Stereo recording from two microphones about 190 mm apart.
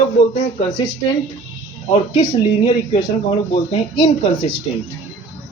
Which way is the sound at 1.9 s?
35° left (ahead or behind).